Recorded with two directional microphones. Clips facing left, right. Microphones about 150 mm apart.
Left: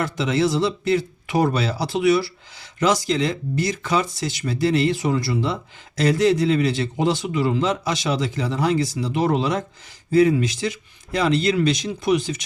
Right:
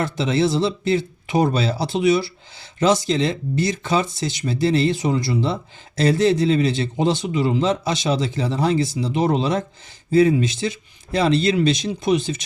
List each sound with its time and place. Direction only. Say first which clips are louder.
0.0 s speech: right 1 dB; 25° right (ahead or behind)